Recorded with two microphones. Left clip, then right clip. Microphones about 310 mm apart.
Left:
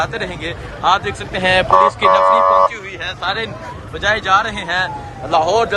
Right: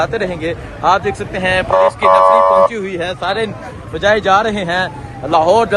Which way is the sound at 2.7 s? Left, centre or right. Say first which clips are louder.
Right 5 dB; centre.